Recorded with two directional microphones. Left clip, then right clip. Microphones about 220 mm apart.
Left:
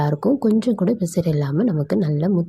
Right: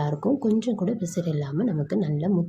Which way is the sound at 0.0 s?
30° left (ahead or behind).